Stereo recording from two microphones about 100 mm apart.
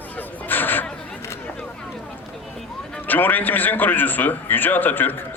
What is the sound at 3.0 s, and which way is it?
A man's voice, 20° left (ahead or behind).